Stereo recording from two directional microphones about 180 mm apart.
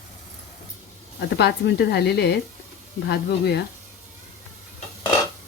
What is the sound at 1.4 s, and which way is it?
Speech, 70° left (ahead or behind).